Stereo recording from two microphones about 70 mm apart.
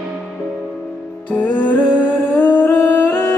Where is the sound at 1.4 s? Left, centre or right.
Left.